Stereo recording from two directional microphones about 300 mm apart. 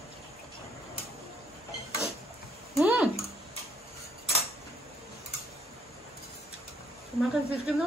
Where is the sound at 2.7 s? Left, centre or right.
Centre.